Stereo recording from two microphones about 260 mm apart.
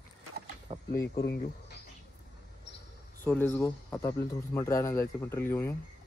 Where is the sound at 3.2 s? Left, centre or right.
Centre.